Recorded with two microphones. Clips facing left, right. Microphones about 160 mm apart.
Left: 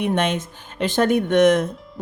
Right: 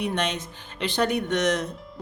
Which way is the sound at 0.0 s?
50° left (ahead or behind).